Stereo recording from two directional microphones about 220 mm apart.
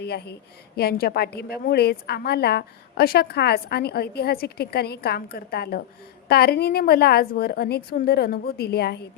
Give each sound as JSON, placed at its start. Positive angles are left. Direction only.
{"t": 0.0, "sound": "a woman's voice", "side_deg": 50}